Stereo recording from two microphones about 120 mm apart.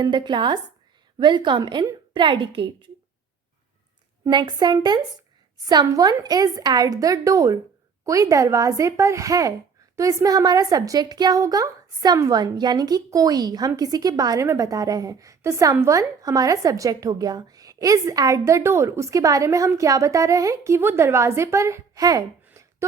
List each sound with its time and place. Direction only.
0.0 s a woman's voice: 40° right (ahead or behind)
4.3 s a woman's voice: 40° right (ahead or behind)
22.4 s a sound: 25° right (ahead or behind)